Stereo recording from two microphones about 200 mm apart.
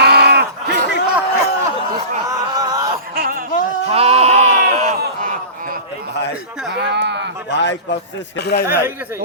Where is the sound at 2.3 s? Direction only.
20° right (ahead or behind).